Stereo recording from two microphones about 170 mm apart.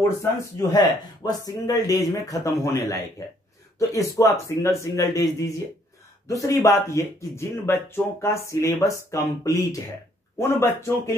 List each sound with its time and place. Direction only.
0.2 s speech: 20° left (ahead or behind)